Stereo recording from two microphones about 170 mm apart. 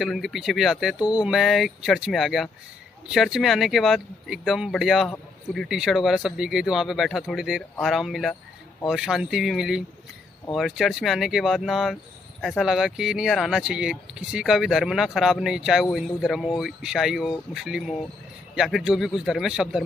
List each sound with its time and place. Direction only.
0.0 s speech: centre (ahead or behind)